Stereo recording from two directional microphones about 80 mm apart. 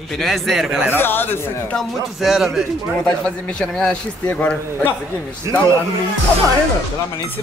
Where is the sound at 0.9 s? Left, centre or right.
Left.